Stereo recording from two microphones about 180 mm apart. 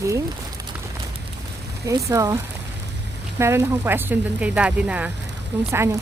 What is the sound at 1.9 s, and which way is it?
Speech, 15° right (ahead or behind).